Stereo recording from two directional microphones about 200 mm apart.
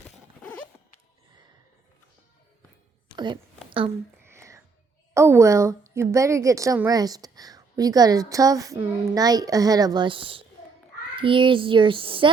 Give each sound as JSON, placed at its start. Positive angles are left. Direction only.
{"t": 3.7, "sound": "a sound", "side_deg": -25}
{"t": 4.3, "sound": "whispering", "side_deg": -15}
{"t": 5.1, "sound": "a woman's voice", "side_deg": -15}